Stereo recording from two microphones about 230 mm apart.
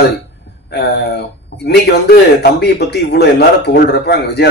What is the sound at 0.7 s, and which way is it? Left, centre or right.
A man's voice, left.